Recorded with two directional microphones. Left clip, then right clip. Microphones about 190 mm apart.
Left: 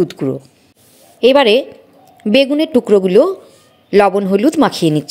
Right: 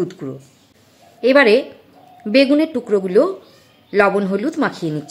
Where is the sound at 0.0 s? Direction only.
35° left (ahead or behind).